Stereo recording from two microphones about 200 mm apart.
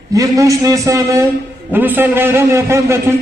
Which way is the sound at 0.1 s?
15° right (ahead or behind).